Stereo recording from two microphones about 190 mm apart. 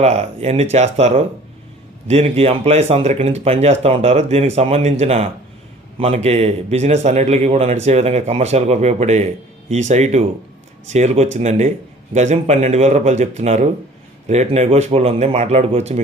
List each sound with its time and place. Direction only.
0.0 s a man's voice: 35° right (ahead or behind)